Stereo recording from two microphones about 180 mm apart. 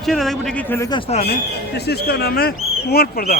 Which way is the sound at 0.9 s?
30° left (ahead or behind).